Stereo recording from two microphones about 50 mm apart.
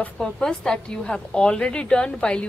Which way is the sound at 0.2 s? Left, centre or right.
Centre.